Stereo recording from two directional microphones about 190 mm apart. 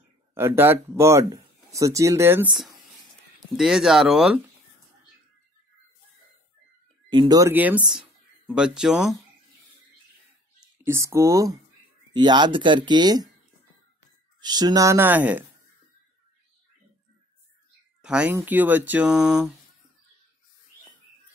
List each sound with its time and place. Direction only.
0.3 s speech: 10° right (ahead or behind)
3.5 s speech: centre (ahead or behind)
7.1 s speech: 25° right (ahead or behind); by 9.1 s 5° right (ahead or behind)
10.8 s speech: 15° right (ahead or behind)
14.4 s speech: 20° right (ahead or behind)
18.0 s speech: 5° right (ahead or behind)